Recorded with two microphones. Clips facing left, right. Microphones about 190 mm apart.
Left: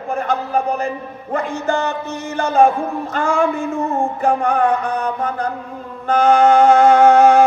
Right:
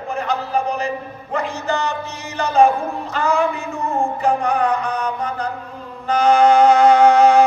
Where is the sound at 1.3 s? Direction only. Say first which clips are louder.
Left 2 dB; 50° left (ahead or behind).